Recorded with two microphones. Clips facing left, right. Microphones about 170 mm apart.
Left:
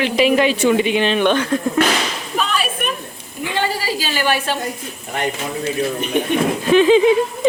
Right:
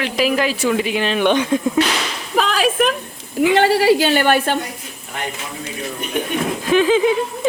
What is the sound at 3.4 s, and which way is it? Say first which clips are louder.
A woman's voice: right 9 dB; 75° right (ahead or behind).